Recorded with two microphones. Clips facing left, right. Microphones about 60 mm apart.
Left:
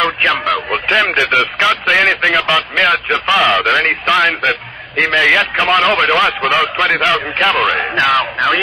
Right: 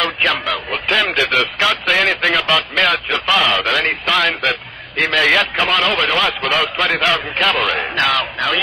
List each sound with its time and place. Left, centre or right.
0.0 s a sound: left
2.2 s a man's voice: centre
5.1 s a man's voice: centre